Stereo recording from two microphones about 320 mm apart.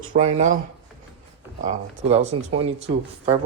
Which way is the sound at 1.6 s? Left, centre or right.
Right.